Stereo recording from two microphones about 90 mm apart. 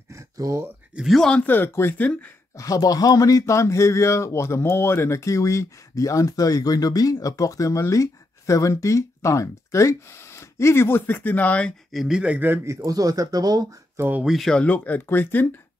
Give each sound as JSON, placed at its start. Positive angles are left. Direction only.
{"t": 0.1, "sound": "a sound", "side_deg": -35}
{"t": 0.9, "sound": "speech", "side_deg": 0}
{"t": 1.4, "sound": "speech", "side_deg": 25}
{"t": 2.5, "sound": "speech", "side_deg": 40}
{"t": 11.9, "sound": "speech", "side_deg": -5}
{"t": 12.6, "sound": "speech", "side_deg": -40}
{"t": 13.9, "sound": "speech", "side_deg": -20}
{"t": 14.2, "sound": "speech", "side_deg": 0}
{"t": 14.5, "sound": "speech", "side_deg": 15}